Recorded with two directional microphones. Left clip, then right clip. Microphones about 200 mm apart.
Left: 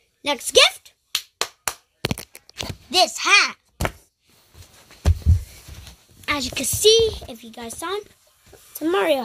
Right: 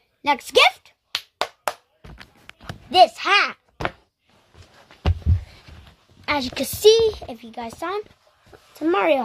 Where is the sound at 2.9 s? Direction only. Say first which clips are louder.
Right 2 dB; centre (ahead or behind).